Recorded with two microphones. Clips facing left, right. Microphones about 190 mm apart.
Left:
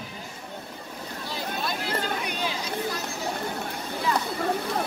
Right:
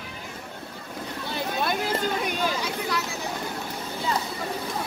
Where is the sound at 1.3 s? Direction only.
55° right (ahead or behind).